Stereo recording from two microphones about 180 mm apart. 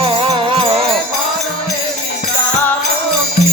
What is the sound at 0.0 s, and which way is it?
Music, 30° right (ahead or behind).